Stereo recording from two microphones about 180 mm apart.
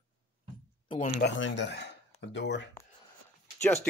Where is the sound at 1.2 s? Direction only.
80° left.